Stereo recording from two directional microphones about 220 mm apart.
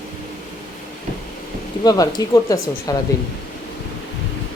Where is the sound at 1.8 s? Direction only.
15° left (ahead or behind).